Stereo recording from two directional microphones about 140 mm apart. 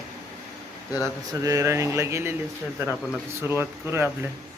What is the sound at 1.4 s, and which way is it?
Speech, 25° right (ahead or behind).